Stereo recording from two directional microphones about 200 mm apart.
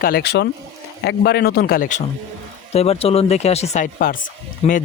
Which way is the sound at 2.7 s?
30° left (ahead or behind).